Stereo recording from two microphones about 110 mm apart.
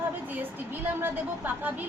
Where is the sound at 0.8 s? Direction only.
20° right (ahead or behind).